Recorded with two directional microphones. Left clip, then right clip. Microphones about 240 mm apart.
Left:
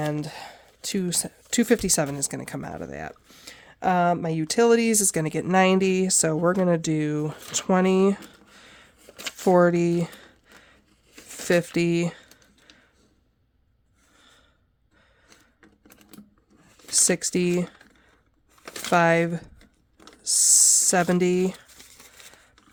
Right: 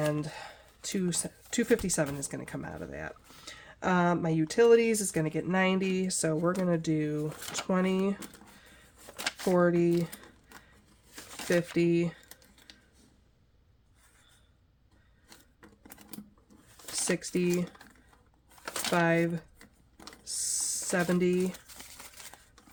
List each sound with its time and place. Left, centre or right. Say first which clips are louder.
0.1 s speech: left 3 dB; left
11.4 s speech: left 5 dB; left
17.1 s speech: left 2 dB; left
18.9 s speech: left 8 dB; left